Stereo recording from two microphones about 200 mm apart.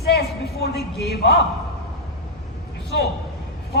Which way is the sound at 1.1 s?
55° left (ahead or behind).